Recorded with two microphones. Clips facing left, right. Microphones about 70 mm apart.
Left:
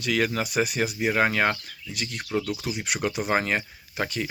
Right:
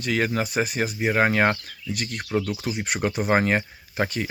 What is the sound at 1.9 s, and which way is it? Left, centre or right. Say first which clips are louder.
Speech: right 2 dB; right.